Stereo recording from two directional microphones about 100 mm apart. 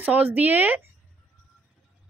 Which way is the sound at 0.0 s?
20° right (ahead or behind).